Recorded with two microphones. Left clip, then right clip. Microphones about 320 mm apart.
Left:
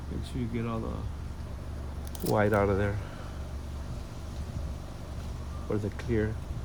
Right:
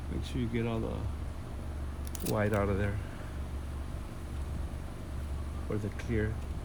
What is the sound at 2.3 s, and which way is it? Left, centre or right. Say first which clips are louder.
Speech: left 6 dB; left.